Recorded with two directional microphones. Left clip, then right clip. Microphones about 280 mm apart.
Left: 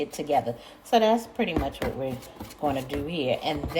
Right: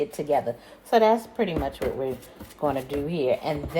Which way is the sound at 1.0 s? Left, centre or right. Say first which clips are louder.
Right 2 dB; centre.